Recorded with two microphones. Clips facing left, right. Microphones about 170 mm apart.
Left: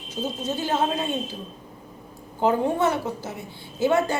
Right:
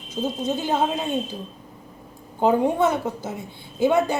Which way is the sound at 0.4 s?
15° right (ahead or behind).